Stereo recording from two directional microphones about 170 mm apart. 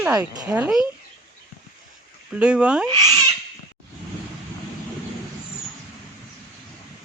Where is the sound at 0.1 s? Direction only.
20° right (ahead or behind).